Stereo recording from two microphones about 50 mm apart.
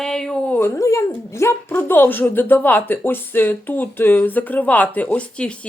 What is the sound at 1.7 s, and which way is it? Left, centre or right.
Speech, left.